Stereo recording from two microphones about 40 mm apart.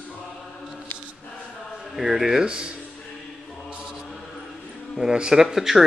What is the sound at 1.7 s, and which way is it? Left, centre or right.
Speech, centre.